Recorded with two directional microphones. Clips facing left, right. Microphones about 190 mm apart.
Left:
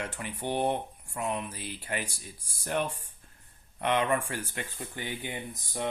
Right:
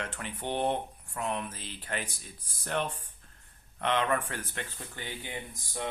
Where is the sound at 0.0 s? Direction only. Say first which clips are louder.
Left 2 dB; 10° left (ahead or behind).